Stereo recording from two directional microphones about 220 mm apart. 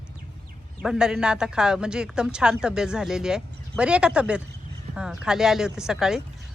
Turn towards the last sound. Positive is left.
turn(degrees=0)  # may be behind; listen again after turning